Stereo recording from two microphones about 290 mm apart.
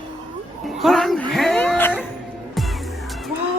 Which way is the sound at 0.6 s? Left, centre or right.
Centre.